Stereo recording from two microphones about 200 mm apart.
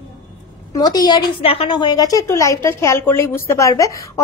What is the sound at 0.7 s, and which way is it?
A woman's voice, 20° left (ahead or behind).